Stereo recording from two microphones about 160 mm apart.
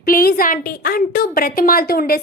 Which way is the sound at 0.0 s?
65° left (ahead or behind).